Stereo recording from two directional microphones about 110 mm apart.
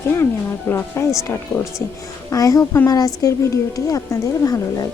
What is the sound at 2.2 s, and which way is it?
A woman's voice, 30° left (ahead or behind).